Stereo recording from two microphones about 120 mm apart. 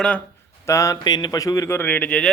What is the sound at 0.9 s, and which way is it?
Speech, 35° left (ahead or behind).